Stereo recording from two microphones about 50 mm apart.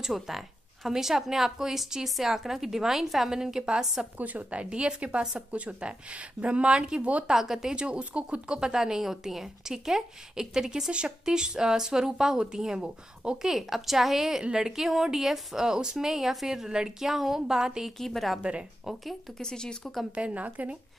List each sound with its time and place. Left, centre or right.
0.0 s a woman's voice: centre
4.2 s a woman's voice: right
7.2 s speech: centre
13.5 s a woman's voice: centre
17.9 s a woman's voice: centre
18.4 s a woman's voice: right
19.3 s speech: centre
20.2 s a woman's voice: right